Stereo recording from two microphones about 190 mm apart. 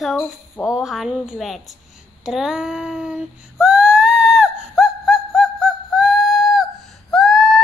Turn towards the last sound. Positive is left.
turn(degrees=0)  # may be behind; listen again after turning